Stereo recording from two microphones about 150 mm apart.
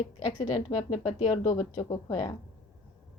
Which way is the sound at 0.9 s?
50° left (ahead or behind).